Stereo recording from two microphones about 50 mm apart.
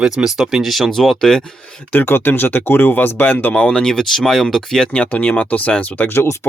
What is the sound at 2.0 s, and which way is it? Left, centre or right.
Speech, left.